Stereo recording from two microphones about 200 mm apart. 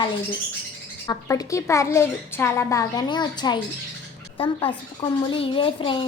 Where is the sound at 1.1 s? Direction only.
15° left (ahead or behind).